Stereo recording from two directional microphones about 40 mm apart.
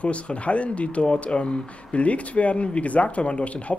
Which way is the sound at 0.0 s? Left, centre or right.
Left.